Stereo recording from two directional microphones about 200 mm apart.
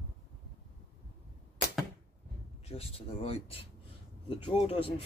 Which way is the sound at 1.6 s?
55° left (ahead or behind).